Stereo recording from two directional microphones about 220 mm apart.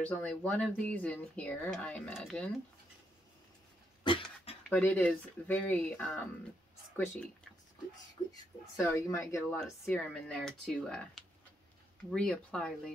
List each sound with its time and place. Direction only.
0.0 s speech: 5° left (ahead or behind)
4.0 s cough: 20° left (ahead or behind)
4.6 s speech: 10° left (ahead or behind)
8.3 s speech: 15° left (ahead or behind)